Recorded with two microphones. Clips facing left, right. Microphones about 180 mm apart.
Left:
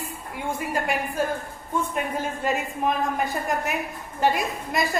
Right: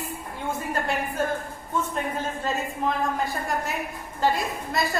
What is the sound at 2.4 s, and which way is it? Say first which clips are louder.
A woman's voice: left 3 dB; 15° left (ahead or behind).